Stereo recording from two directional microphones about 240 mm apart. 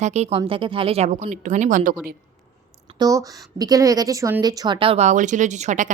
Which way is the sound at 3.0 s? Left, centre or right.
Centre.